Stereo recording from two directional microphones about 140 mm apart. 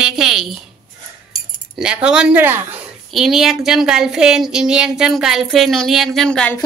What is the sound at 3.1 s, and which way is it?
Speech, centre (ahead or behind).